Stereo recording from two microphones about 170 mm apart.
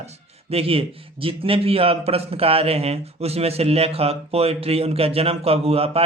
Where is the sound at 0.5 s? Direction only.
35° right (ahead or behind).